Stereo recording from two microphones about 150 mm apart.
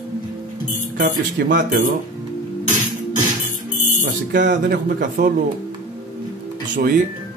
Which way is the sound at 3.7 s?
60° right (ahead or behind).